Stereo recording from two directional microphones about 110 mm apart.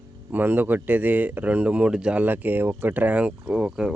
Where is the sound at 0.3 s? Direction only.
15° right (ahead or behind).